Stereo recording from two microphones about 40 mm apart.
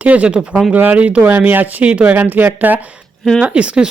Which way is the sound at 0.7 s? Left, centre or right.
Right.